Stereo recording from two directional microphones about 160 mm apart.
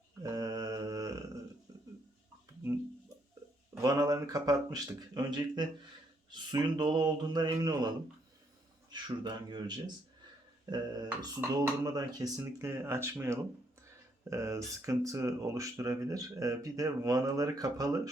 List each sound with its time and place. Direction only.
0.2 s mantra: 25° right (ahead or behind)
1.7 s a sound: 25° right (ahead or behind)
3.8 s speech: 20° right (ahead or behind)